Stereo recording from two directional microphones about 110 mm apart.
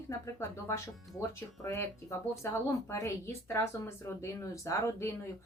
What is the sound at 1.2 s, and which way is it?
A woman's voice, 25° left (ahead or behind).